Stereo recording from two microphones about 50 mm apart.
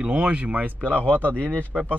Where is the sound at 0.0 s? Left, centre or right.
Right.